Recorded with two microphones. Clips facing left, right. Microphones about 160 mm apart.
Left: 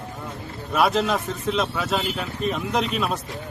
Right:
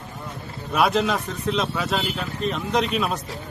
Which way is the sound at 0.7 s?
Centre (ahead or behind).